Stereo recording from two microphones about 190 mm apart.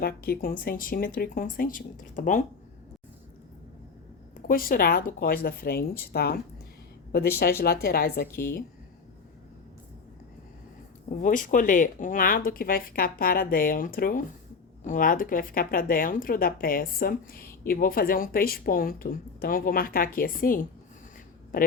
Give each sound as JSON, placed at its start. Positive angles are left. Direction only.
{"t": 0.0, "sound": "speech", "side_deg": 50}
{"t": 4.4, "sound": "speech", "side_deg": 50}
{"t": 11.1, "sound": "speech", "side_deg": 45}